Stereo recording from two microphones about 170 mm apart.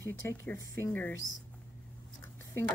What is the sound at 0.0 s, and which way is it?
Speech, 15° left (ahead or behind).